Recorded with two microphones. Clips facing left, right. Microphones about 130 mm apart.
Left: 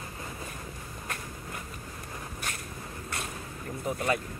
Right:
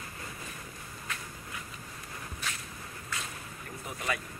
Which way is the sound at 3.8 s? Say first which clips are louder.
Left 7 dB; 45° left (ahead or behind).